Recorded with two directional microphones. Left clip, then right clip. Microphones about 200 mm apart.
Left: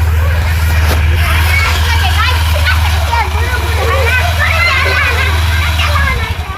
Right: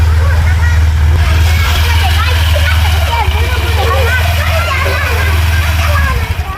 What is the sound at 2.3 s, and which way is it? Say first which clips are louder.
Vehicle: even; 10° right (ahead or behind).